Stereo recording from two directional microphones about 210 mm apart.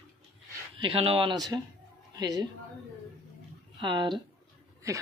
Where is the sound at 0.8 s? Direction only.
25° right (ahead or behind).